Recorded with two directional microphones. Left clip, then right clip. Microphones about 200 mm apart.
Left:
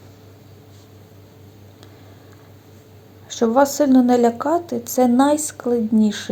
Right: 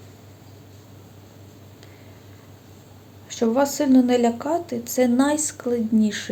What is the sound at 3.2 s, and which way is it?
A woman's voice, 15° left (ahead or behind).